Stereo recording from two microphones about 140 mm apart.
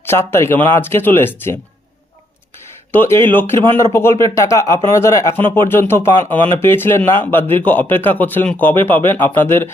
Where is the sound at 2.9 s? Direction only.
15° left (ahead or behind).